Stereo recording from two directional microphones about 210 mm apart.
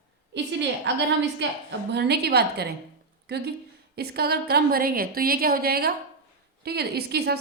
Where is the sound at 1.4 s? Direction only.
55° right (ahead or behind).